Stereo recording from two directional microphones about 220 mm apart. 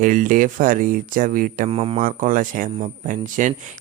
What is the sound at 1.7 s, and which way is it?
Speech, 25° right (ahead or behind).